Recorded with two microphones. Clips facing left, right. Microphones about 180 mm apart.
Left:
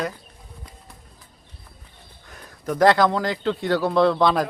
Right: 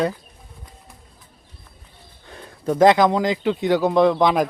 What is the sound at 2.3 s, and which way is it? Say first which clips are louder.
Speech: right 5 dB; 30° right (ahead or behind).